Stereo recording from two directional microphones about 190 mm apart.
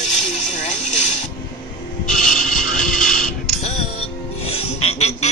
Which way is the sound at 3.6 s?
35° left (ahead or behind).